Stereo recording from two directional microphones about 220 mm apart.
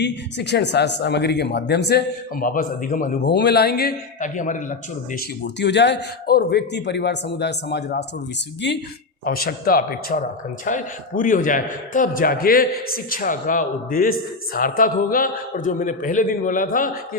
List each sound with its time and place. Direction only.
0.0 s speech: 50° left (ahead or behind); by 4.5 s 35° left (ahead or behind)
5.5 s a man's voice: 50° left (ahead or behind)